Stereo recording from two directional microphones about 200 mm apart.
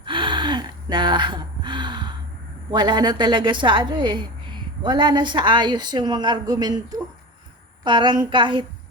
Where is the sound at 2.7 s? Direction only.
20° right (ahead or behind).